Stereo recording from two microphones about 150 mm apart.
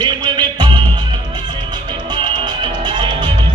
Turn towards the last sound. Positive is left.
turn(degrees=-30)  # may be behind; listen again after turning